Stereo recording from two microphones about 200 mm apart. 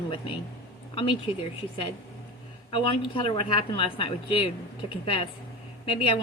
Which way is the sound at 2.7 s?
25° left (ahead or behind).